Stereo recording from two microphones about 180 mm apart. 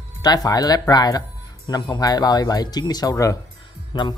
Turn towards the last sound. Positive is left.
turn(degrees=25)  # may be behind; listen again after turning